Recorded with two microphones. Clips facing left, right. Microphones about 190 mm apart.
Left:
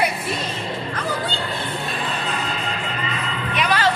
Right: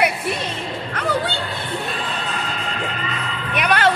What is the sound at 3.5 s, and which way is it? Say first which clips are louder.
Music: right 2 dB; 60° right (ahead or behind).